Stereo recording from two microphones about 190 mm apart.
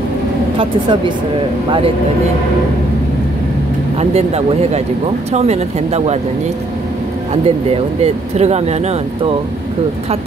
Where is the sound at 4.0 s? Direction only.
35° right (ahead or behind).